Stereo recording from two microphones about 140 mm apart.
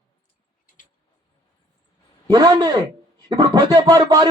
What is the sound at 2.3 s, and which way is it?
Speech, 30° right (ahead or behind).